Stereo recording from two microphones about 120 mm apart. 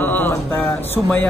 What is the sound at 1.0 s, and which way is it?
Speech, 10° right (ahead or behind).